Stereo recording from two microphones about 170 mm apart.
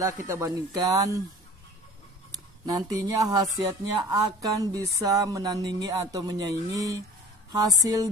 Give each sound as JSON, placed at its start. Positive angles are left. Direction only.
{"t": 0.3, "sound": "speech", "side_deg": -20}
{"t": 2.6, "sound": "speech", "side_deg": -20}